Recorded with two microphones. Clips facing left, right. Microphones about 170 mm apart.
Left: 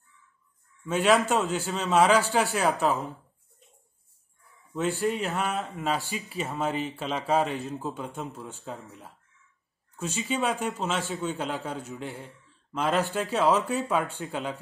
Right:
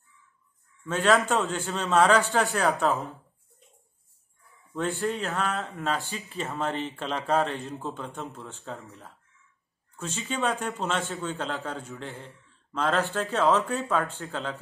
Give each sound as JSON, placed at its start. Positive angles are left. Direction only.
{"t": 0.8, "sound": "a man's voice", "side_deg": 10}
{"t": 5.0, "sound": "a man's voice", "side_deg": 15}